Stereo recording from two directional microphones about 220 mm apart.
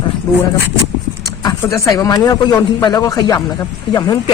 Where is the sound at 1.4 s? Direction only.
15° left (ahead or behind).